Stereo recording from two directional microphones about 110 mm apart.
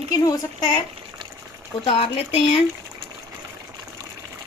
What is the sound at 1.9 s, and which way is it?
Speech, 60° left (ahead or behind).